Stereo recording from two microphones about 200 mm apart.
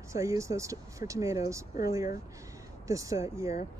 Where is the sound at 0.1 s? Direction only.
15° right (ahead or behind).